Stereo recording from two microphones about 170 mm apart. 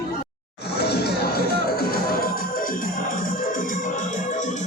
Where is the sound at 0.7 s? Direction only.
75° left (ahead or behind).